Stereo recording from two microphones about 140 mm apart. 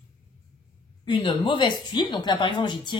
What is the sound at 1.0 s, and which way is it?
Speech, 40° left (ahead or behind).